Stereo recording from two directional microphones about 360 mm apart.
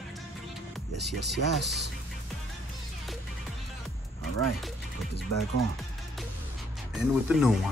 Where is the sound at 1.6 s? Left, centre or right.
Right.